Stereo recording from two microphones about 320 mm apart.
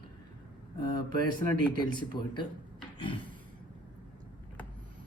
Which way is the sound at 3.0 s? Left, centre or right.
Centre.